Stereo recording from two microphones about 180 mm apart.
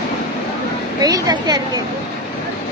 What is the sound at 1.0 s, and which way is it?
Speech, 20° right (ahead or behind).